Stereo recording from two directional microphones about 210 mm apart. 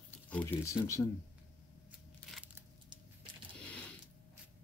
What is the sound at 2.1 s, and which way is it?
Crushing, centre (ahead or behind).